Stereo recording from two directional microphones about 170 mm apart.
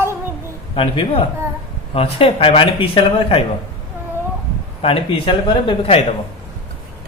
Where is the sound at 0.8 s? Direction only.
30° left (ahead or behind).